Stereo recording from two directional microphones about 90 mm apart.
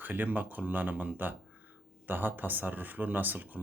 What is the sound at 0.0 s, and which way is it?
Speech, 20° right (ahead or behind).